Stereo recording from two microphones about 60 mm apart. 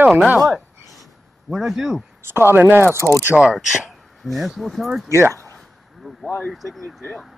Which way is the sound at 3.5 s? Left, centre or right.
Centre.